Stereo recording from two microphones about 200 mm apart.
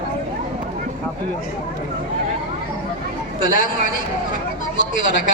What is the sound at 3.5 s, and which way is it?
Speech, 45° left (ahead or behind).